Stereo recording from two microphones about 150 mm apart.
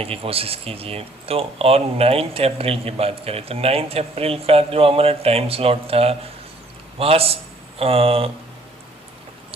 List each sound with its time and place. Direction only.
0.0 s speech: 40° right (ahead or behind)